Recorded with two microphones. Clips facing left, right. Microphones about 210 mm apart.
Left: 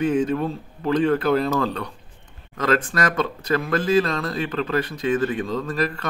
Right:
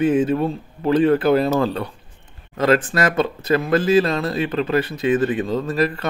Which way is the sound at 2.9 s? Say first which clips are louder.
Right 4 dB; 25° right (ahead or behind).